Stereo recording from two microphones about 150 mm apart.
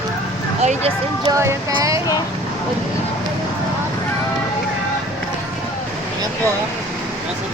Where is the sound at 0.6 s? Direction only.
50° right (ahead or behind).